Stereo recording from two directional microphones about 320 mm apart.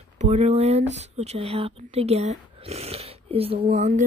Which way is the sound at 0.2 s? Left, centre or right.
Right.